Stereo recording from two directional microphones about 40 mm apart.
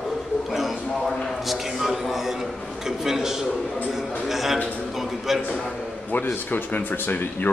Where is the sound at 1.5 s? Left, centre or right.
Centre.